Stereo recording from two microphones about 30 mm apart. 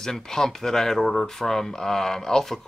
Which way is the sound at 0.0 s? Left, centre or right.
Centre.